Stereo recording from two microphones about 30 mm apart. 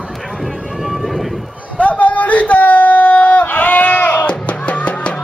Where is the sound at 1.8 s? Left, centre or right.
Left.